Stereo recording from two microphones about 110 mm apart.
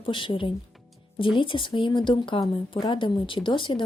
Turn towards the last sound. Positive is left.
turn(degrees=50)  # may be behind; listen again after turning